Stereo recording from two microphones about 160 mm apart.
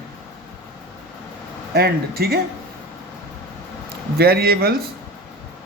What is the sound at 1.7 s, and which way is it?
Speech, 75° right (ahead or behind).